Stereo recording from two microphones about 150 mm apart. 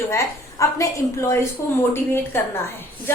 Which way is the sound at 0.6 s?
20° left (ahead or behind).